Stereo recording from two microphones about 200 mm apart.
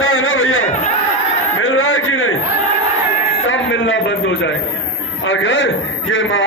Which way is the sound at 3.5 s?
70° left (ahead or behind).